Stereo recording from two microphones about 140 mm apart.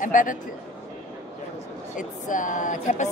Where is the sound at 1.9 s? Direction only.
70° left (ahead or behind).